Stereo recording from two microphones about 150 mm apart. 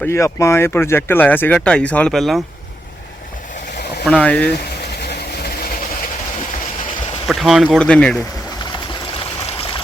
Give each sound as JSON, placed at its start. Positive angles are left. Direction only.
{"t": 0.0, "sound": "speech", "side_deg": 20}
{"t": 4.0, "sound": "speech", "side_deg": 5}
{"t": 5.0, "sound": "vehicle", "side_deg": 90}
{"t": 7.3, "sound": "speech", "side_deg": 0}